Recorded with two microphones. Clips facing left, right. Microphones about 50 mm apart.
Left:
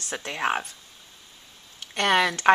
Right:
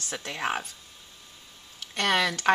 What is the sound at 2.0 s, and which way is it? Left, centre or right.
Speech, centre.